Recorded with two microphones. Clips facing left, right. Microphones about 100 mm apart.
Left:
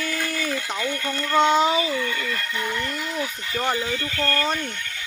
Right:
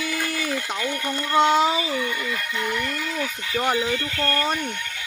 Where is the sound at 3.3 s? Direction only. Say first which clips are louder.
Right 5 dB; 5° right (ahead or behind).